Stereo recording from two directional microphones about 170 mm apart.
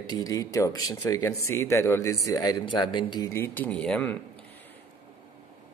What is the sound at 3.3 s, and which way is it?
Speech, 10° left (ahead or behind).